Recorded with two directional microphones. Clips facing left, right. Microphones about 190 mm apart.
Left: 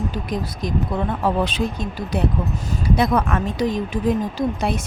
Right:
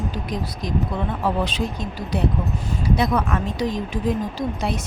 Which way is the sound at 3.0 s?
55° left (ahead or behind).